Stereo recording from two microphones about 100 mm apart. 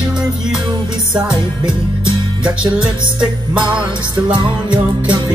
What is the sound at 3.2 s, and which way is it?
Music, 50° right (ahead or behind).